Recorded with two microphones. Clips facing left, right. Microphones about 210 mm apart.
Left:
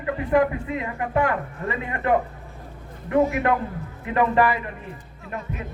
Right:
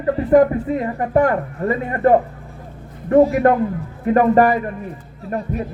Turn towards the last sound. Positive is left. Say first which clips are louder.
# right 9 dB
turn(degrees=-35)  # may be behind; listen again after turning